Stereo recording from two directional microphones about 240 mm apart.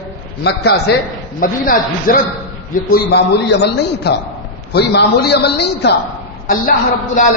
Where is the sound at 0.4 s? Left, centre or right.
Left.